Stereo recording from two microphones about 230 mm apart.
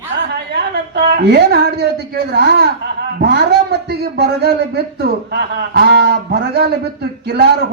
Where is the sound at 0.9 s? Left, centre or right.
Right.